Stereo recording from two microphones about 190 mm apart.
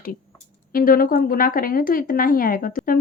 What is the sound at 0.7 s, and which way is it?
Speech, 50° left (ahead or behind).